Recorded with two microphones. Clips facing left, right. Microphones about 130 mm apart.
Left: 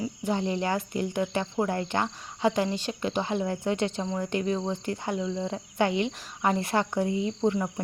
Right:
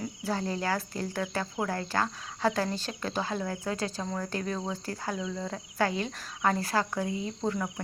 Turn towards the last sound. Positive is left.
turn(degrees=25)  # may be behind; listen again after turning